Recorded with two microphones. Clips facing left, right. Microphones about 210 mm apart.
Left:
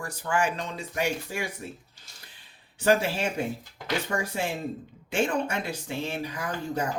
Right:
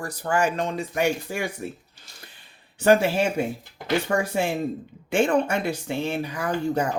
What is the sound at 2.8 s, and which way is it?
Speech, 55° right (ahead or behind).